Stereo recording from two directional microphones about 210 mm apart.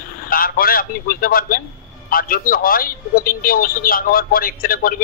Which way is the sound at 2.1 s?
45° left (ahead or behind).